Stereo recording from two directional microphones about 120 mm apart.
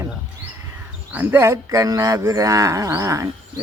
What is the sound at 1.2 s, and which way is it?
Livestock, 20° right (ahead or behind).